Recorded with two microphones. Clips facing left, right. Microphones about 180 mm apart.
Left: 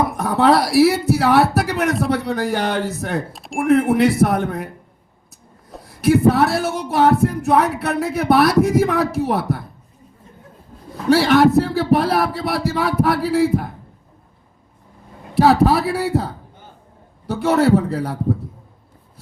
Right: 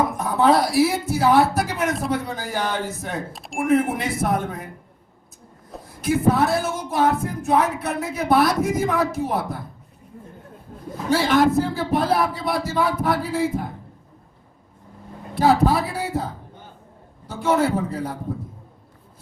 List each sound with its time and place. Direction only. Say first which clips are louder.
0.2 s speech: left 3 dB; 70° left (ahead or behind)
3.3 s speech: left 5 dB; centre (ahead or behind)
3.9 s speech: left 8 dB; 70° left (ahead or behind)
6.0 s speech: left 5 dB; 70° left (ahead or behind)
11.1 s speech: left 5 dB; 70° left (ahead or behind)
15.4 s a man's voice: left 4 dB; 70° left (ahead or behind)